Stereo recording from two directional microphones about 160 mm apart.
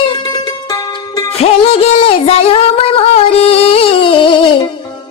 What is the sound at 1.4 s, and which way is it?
Music, 35° left (ahead or behind).